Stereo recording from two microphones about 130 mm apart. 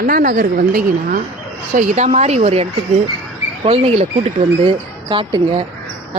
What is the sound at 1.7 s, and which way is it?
Speech, 60° right (ahead or behind).